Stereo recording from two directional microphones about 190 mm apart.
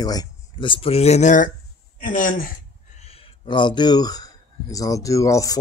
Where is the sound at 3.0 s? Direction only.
30° left (ahead or behind).